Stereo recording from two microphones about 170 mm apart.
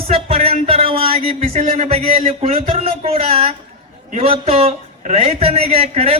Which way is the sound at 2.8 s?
35° right (ahead or behind).